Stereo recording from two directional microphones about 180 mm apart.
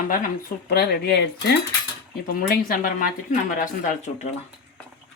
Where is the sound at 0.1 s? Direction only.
55° left (ahead or behind).